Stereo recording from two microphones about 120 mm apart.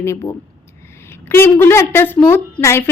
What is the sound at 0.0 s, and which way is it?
A woman's voice, 25° left (ahead or behind).